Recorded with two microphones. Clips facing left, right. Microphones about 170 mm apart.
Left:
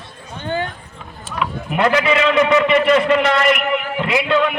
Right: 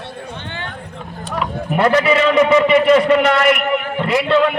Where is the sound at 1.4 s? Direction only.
40° right (ahead or behind).